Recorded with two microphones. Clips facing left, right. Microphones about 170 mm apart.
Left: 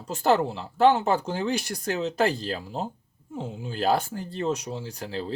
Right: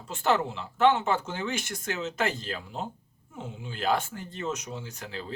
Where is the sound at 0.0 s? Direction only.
35° left (ahead or behind).